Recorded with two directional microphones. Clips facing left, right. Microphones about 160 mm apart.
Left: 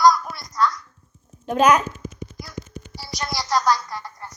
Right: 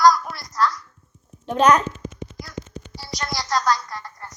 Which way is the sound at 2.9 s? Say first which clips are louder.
Even; 5° left (ahead or behind).